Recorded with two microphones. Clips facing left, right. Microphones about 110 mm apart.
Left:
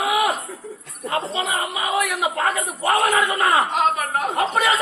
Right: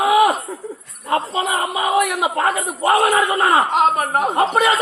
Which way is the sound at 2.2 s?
30° right (ahead or behind).